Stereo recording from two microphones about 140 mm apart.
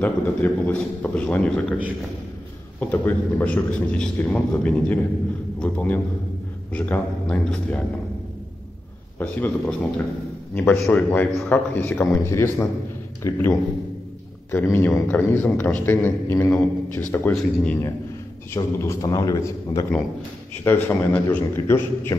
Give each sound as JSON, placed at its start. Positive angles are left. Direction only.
{"t": 0.0, "sound": "a man's voice", "side_deg": 10}
{"t": 2.8, "sound": "a man's voice", "side_deg": 15}
{"t": 9.2, "sound": "a man's voice", "side_deg": 10}
{"t": 18.8, "sound": "a man's voice", "side_deg": 20}
{"t": 20.6, "sound": "a man's voice", "side_deg": 15}